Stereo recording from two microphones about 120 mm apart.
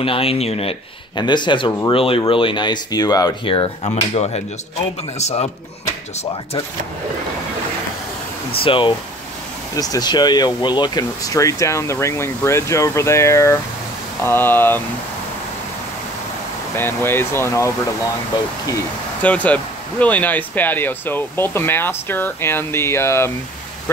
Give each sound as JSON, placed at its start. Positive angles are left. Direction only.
{"t": 0.0, "sound": "speech", "side_deg": 50}
{"t": 1.1, "sound": "speech", "side_deg": 40}
{"t": 3.4, "sound": "speech", "side_deg": 45}
{"t": 3.8, "sound": "speech", "side_deg": 60}
{"t": 8.6, "sound": "speech", "side_deg": 45}
{"t": 9.8, "sound": "speech", "side_deg": 30}
{"t": 16.7, "sound": "speech", "side_deg": 20}
{"t": 19.2, "sound": "speech", "side_deg": 10}